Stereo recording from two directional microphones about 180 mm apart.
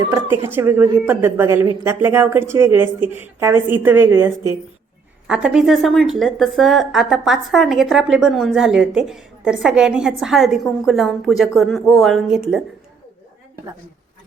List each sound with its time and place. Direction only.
0.1 s a woman's voice: 10° right (ahead or behind)